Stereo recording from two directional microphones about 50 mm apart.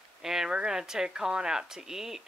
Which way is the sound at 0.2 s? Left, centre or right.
Centre.